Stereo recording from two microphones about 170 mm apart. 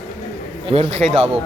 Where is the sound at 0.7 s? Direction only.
35° right (ahead or behind).